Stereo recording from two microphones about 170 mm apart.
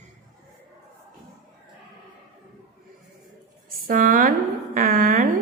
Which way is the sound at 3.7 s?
55° right (ahead or behind).